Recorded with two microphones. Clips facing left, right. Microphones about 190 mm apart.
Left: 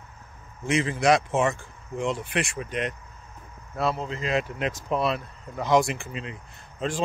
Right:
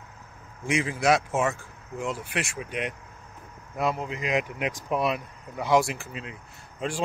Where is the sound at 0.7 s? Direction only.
10° right (ahead or behind).